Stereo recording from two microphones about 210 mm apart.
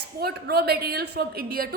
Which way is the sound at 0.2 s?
50° right (ahead or behind).